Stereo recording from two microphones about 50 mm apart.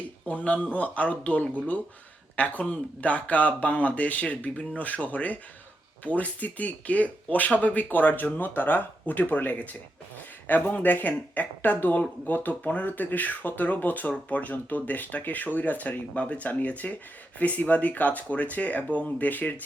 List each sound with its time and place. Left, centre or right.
0.3 s speech: left